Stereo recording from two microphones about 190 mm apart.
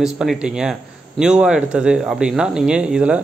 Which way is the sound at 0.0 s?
5° right (ahead or behind).